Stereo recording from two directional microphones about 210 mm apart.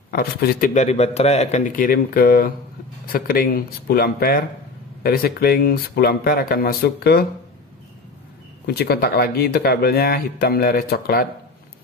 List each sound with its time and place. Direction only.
0.1 s a man's voice: 45° left (ahead or behind)
8.6 s speech: 50° left (ahead or behind)